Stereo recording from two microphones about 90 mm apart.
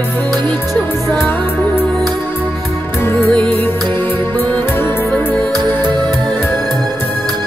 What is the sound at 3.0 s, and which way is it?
Music, 25° left (ahead or behind).